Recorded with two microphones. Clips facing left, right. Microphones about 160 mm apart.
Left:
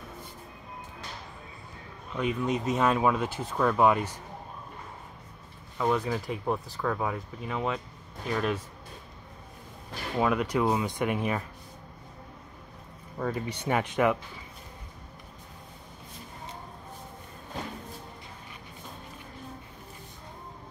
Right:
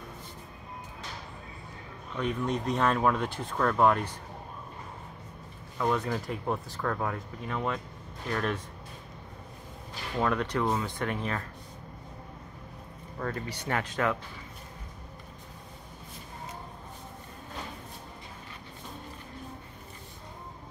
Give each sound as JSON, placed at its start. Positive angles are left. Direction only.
{"t": 2.1, "sound": "speech", "side_deg": 5}
{"t": 5.8, "sound": "speech", "side_deg": 5}
{"t": 10.1, "sound": "speech", "side_deg": 10}
{"t": 13.5, "sound": "speech", "side_deg": 20}